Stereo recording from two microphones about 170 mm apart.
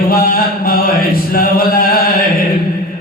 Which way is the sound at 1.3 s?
60° left (ahead or behind).